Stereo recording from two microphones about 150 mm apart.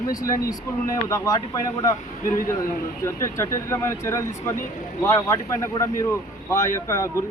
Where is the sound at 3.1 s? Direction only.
20° left (ahead or behind).